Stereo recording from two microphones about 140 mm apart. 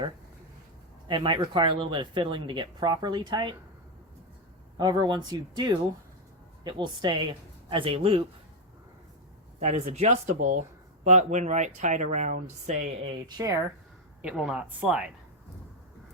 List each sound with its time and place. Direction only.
1.0 s speech: 35° right (ahead or behind)
4.8 s speech: 30° right (ahead or behind)
9.6 s speech: 50° right (ahead or behind)
13.0 s speech: 35° right (ahead or behind)
14.2 s speech: 5° right (ahead or behind)